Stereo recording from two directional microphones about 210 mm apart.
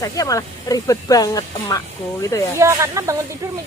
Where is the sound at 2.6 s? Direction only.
15° right (ahead or behind).